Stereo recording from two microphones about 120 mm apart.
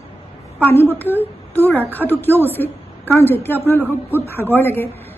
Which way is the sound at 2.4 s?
15° left (ahead or behind).